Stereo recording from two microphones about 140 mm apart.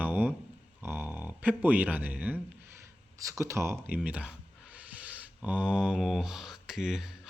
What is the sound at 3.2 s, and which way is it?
Speech, 20° right (ahead or behind).